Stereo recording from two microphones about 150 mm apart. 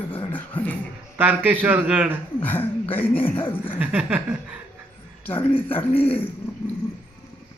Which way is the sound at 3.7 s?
10° right (ahead or behind).